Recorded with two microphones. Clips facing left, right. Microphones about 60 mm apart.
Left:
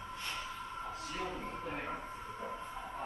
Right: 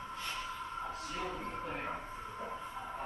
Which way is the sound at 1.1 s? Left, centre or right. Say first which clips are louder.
Even; centre.